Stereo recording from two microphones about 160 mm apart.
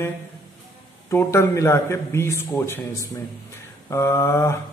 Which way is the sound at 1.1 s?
15° left (ahead or behind).